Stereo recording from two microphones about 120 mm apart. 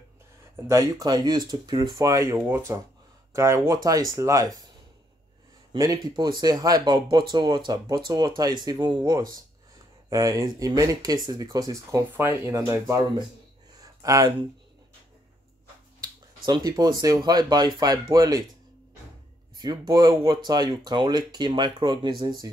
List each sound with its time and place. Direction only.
0.7 s speech: 25° right (ahead or behind)
5.7 s speech: 35° right (ahead or behind)
13.7 s a sound: 30° right (ahead or behind)
16.0 s speech: 35° right (ahead or behind)
19.6 s speech: 35° right (ahead or behind)